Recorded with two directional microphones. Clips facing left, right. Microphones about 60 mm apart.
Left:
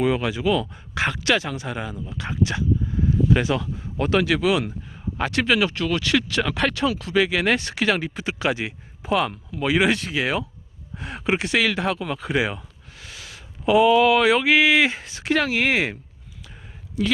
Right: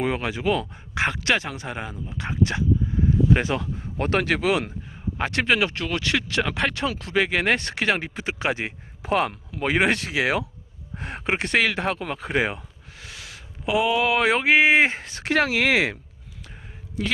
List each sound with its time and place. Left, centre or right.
0.0 s speech: right
3.9 s speech: right
5.1 s speech: right
9.0 s speech: right
9.9 s speech: right
10.9 s speech: right
13.7 s speech: centre; by 15.0 s right
15.0 s speech: right
17.0 s speech: right